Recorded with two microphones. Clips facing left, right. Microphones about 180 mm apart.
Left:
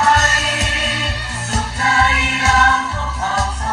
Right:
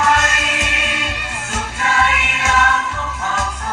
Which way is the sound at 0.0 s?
35° left (ahead or behind).